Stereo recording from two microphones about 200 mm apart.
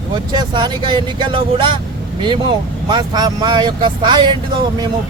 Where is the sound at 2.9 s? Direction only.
20° right (ahead or behind).